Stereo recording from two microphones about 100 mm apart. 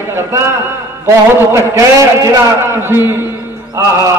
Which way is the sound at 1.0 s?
30° right (ahead or behind).